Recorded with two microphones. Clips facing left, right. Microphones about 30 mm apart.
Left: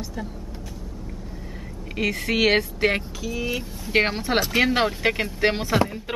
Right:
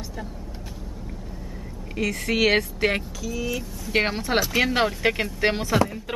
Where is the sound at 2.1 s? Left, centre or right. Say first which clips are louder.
Even; centre.